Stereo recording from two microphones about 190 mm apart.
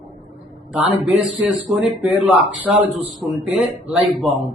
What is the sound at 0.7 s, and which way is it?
Speech, 5° right (ahead or behind).